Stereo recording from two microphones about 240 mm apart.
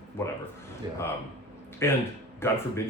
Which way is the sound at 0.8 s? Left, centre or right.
Centre.